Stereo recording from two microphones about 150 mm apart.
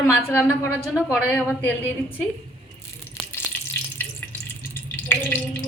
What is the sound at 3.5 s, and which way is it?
Frying, 15° left (ahead or behind).